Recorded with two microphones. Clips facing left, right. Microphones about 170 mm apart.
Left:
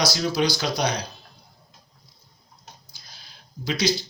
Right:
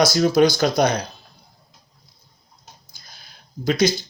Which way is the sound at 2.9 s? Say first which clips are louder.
Right 2 dB; 50° right (ahead or behind).